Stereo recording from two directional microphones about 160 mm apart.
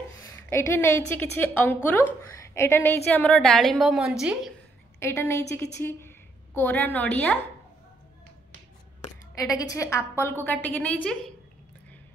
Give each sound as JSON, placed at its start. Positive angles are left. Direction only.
{"t": 0.2, "sound": "a woman's voice", "side_deg": 15}
{"t": 5.0, "sound": "a woman's voice", "side_deg": 15}
{"t": 9.4, "sound": "a woman's voice", "side_deg": 20}